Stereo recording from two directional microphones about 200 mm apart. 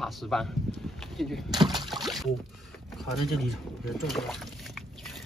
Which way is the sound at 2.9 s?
Centre (ahead or behind).